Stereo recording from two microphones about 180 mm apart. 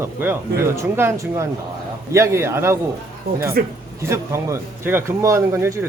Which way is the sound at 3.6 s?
55° right (ahead or behind).